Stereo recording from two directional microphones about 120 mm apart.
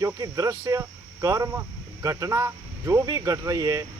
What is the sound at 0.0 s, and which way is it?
Speech, 30° right (ahead or behind).